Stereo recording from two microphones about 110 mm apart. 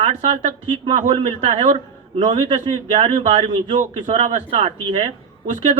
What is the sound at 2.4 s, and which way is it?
Speech, 75° right (ahead or behind).